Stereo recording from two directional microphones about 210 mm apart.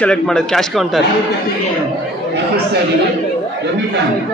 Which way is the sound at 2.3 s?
50° right (ahead or behind).